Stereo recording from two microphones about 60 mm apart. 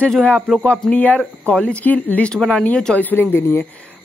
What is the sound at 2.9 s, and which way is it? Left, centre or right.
Speech, left.